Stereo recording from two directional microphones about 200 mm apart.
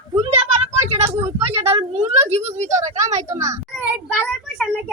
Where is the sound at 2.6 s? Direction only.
35° right (ahead or behind).